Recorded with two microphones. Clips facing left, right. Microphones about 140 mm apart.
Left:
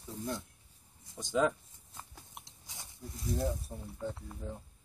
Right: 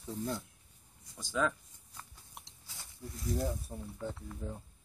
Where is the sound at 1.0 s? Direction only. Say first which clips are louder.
Left 3 dB; 25° left (ahead or behind).